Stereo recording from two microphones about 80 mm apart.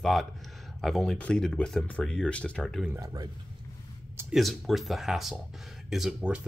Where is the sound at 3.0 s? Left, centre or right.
Right.